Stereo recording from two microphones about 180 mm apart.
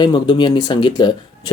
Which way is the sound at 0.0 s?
25° left (ahead or behind).